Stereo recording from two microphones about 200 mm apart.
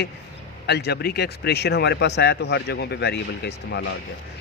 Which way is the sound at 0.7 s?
55° left (ahead or behind).